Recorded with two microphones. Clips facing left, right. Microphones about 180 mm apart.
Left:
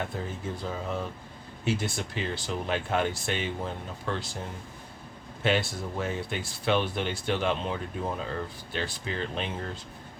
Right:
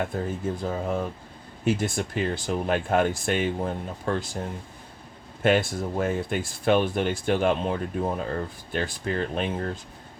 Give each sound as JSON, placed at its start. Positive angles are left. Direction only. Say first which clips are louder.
{"t": 0.1, "sound": "speech", "louder": "right 6 dB", "side_deg": -45}
{"t": 5.4, "sound": "speech", "louder": "right 5 dB", "side_deg": -50}